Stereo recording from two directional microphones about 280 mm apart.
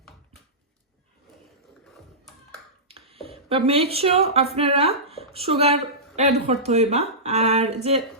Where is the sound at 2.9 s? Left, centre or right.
Right.